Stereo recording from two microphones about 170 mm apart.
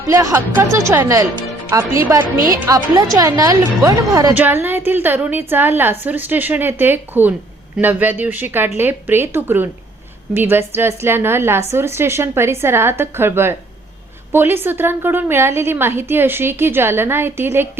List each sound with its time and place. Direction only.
0.1 s a woman's voice: 20° right (ahead or behind)